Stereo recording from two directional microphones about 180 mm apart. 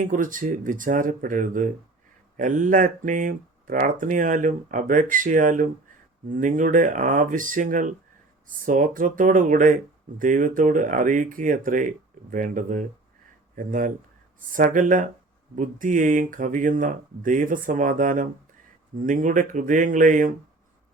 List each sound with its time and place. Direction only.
0.0 s speech: 45° right (ahead or behind)